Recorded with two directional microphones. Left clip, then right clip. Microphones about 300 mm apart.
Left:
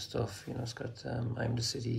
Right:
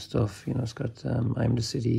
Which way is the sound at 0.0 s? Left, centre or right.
Centre.